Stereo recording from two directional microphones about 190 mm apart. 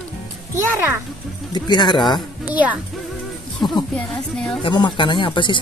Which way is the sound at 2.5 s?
10° right (ahead or behind).